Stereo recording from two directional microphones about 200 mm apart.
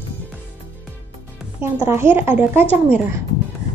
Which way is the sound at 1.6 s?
10° right (ahead or behind).